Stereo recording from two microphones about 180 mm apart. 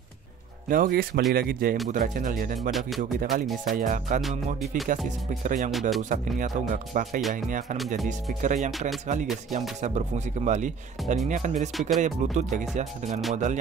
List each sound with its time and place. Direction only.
0.7 s speech: 55° right (ahead or behind)
5.7 s speech: centre (ahead or behind)
6.0 s speech: 45° right (ahead or behind)
8.3 s speech: 45° right (ahead or behind)